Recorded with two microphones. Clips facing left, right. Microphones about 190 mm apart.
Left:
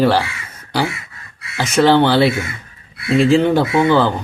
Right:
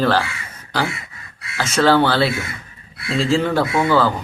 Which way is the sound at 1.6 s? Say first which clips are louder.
Left 3 dB; 15° left (ahead or behind).